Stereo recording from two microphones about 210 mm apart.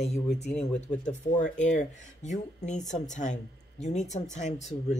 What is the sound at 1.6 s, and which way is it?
Speech, 35° left (ahead or behind).